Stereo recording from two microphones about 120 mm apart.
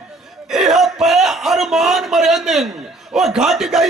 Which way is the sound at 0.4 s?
5° right (ahead or behind).